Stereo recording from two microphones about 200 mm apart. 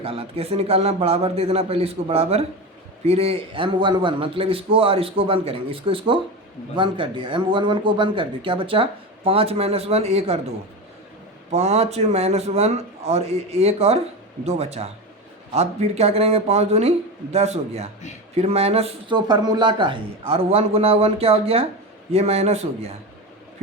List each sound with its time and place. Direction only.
0.0 s speech: 30° right (ahead or behind)
11.5 s a man's voice: 35° right (ahead or behind)